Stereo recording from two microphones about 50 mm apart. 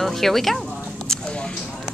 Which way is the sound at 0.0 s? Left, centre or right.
Centre.